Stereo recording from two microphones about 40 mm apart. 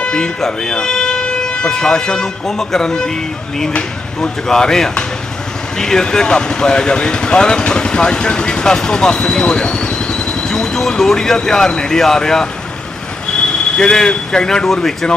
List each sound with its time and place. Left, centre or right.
0.4 s toot: centre
1.7 s speech: centre
4.2 s speech: centre